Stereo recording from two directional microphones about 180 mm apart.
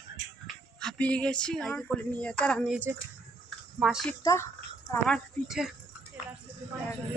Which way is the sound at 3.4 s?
Centre (ahead or behind).